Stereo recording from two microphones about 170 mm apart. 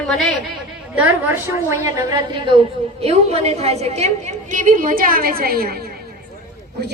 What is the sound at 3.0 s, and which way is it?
A woman's voice, 40° right (ahead or behind).